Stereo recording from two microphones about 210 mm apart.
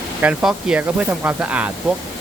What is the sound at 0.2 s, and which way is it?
Speech, 5° right (ahead or behind).